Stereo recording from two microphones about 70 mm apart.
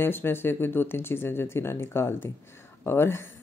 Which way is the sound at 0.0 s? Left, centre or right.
Left.